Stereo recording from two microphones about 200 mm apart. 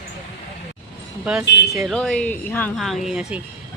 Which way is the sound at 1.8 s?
Centre (ahead or behind).